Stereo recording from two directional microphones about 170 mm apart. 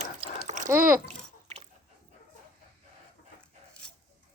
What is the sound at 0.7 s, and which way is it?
Speech, 10° right (ahead or behind).